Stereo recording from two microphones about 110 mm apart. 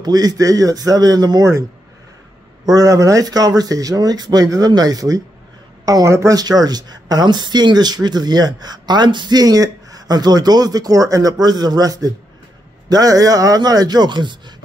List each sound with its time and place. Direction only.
0.0 s speech: 35° right (ahead or behind)
2.7 s speech: 30° right (ahead or behind)